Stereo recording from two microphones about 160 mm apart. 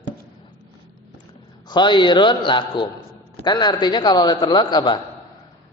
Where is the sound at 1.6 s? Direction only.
30° left (ahead or behind).